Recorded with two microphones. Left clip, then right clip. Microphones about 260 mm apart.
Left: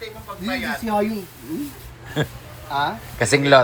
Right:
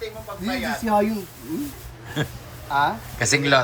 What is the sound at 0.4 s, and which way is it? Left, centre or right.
Speech, centre.